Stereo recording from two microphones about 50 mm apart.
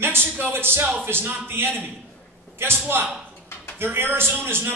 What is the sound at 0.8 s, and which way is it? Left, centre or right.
Speech, right.